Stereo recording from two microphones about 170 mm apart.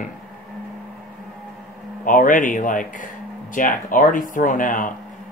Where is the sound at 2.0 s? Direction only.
50° left (ahead or behind).